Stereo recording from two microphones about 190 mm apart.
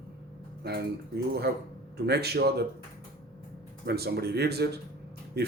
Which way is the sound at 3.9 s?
55° right (ahead or behind).